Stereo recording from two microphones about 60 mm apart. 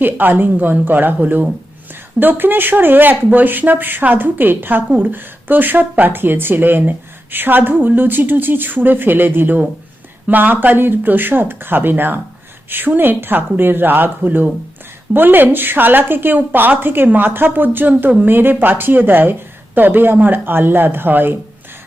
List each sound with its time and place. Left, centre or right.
0.0 s speech: right